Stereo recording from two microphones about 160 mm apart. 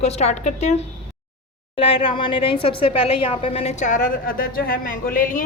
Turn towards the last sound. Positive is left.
turn(degrees=55)  # may be behind; listen again after turning